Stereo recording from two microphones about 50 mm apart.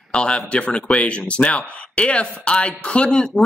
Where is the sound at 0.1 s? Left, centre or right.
Centre.